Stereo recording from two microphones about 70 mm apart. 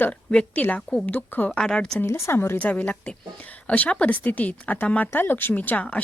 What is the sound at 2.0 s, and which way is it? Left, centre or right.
Speech, left.